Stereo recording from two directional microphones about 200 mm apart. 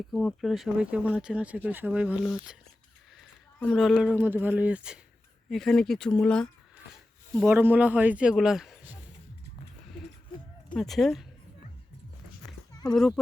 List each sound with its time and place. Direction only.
0.1 s speech: centre (ahead or behind)
3.7 s speech: centre (ahead or behind)
7.4 s speech: 10° right (ahead or behind)
10.8 s speech: centre (ahead or behind)
12.9 s speech: centre (ahead or behind)